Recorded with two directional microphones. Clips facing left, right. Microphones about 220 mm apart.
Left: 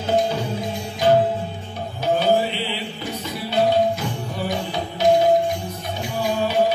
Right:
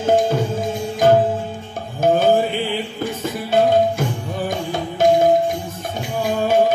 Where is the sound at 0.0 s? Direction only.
50° right (ahead or behind).